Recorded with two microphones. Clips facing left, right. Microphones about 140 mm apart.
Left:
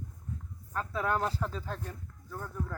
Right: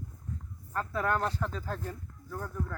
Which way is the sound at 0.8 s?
Centre (ahead or behind).